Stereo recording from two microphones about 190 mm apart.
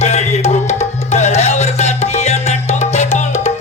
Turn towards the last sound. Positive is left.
turn(degrees=35)  # may be behind; listen again after turning